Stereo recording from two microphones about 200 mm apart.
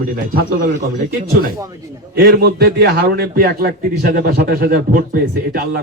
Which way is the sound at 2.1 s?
50° right (ahead or behind).